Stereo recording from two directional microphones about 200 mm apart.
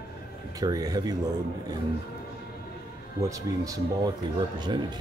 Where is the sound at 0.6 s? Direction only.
20° right (ahead or behind).